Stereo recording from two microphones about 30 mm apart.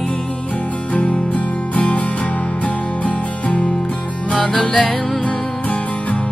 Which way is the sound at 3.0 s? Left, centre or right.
Left.